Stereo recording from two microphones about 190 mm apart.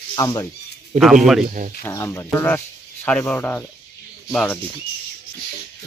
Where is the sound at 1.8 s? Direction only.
15° left (ahead or behind).